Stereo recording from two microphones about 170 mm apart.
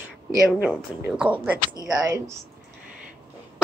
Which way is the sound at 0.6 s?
5° right (ahead or behind).